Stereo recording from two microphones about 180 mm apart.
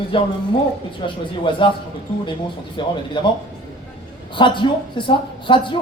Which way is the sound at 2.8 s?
25° left (ahead or behind).